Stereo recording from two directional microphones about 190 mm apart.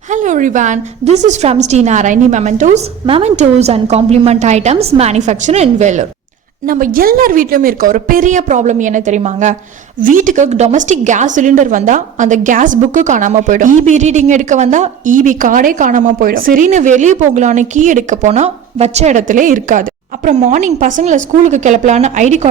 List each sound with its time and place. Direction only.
0.1 s a woman's voice: 40° right (ahead or behind)